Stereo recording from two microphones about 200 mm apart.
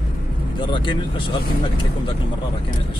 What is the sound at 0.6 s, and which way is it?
Speech, 25° left (ahead or behind).